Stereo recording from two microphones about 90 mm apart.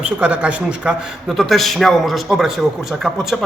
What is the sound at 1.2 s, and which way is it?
A man's voice, centre (ahead or behind).